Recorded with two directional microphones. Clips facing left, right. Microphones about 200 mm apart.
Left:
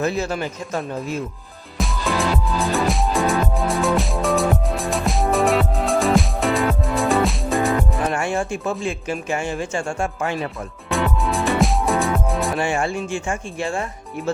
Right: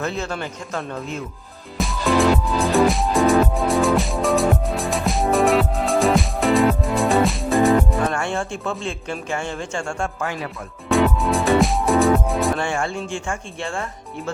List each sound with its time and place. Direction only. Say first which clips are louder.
0.0 s speech: left 4 dB; 15° left (ahead or behind)
1.8 s music: right 4 dB; centre (ahead or behind)
8.1 s speech: left 2 dB; 15° left (ahead or behind)
10.8 s music: right 4 dB; centre (ahead or behind)
12.5 s speech: left 2 dB; 20° left (ahead or behind)